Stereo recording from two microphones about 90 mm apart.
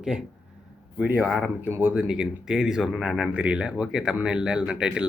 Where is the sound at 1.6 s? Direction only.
25° right (ahead or behind).